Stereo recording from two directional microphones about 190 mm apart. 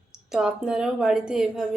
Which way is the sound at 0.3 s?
5° right (ahead or behind).